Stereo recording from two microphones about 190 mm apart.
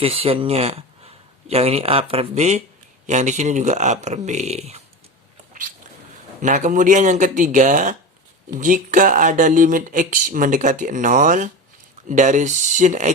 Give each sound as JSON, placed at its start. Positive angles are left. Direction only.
{"t": 0.0, "sound": "speech", "side_deg": -30}
{"t": 6.4, "sound": "speech", "side_deg": -40}